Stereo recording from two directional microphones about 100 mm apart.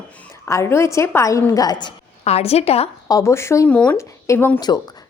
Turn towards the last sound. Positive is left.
turn(degrees=20)  # may be behind; listen again after turning